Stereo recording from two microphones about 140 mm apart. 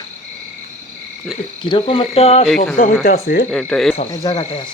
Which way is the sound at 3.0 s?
90° left.